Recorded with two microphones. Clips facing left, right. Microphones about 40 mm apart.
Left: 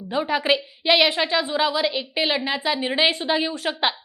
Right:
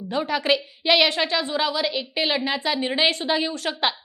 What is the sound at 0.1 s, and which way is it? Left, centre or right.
A woman's voice, centre.